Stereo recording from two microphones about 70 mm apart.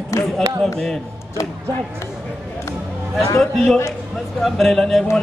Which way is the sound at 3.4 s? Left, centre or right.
Centre.